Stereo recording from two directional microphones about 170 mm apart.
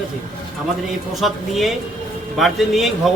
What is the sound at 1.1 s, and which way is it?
A man's voice, centre (ahead or behind).